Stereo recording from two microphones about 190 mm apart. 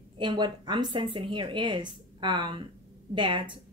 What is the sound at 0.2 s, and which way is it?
Speech, 25° right (ahead or behind).